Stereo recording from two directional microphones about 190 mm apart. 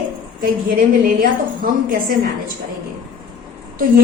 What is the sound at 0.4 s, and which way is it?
A woman's voice, 50° right (ahead or behind).